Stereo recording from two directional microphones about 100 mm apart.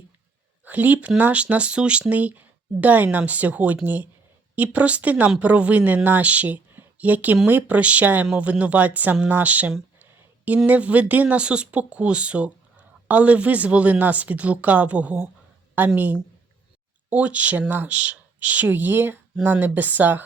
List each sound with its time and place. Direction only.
0.6 s speech: 15° right (ahead or behind)
10.0 s a sound: 15° right (ahead or behind)
10.7 s speech: 15° right (ahead or behind)